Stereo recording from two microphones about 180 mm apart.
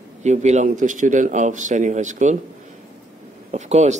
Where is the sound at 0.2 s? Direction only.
40° right (ahead or behind).